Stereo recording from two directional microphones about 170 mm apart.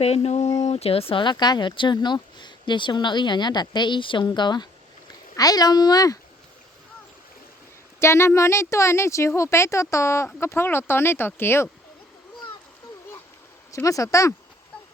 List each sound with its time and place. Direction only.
0.0 s speech: 35° left (ahead or behind); by 6.1 s 20° left (ahead or behind)
7.9 s speech: 15° left (ahead or behind)
13.7 s speech: 20° left (ahead or behind)